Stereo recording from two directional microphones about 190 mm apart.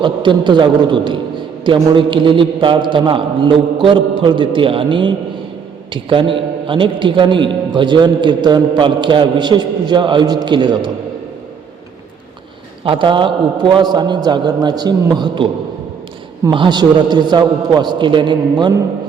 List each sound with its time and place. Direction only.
0.0 s a man's voice: 25° right (ahead or behind)
12.8 s a man's voice: 25° right (ahead or behind)